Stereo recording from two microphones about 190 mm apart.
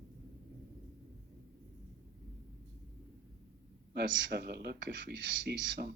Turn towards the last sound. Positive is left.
turn(degrees=-70)  # may be behind; listen again after turning